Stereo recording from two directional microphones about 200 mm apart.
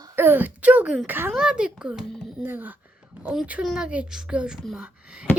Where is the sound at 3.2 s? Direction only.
5° right (ahead or behind).